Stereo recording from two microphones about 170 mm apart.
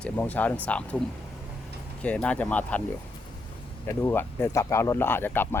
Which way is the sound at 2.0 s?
5° left (ahead or behind).